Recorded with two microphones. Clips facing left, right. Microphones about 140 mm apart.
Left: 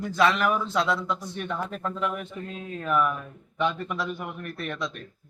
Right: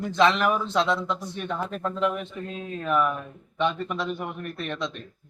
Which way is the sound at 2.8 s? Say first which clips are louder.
Right 1 dB; 20° right (ahead or behind).